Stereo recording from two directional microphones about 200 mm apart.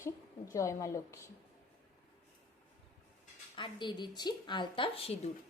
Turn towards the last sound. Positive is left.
turn(degrees=30)  # may be behind; listen again after turning